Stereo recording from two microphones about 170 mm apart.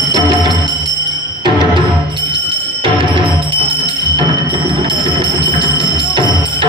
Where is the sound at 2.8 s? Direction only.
30° right (ahead or behind).